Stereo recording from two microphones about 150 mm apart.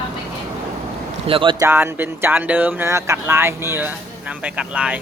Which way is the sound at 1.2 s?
35° right (ahead or behind).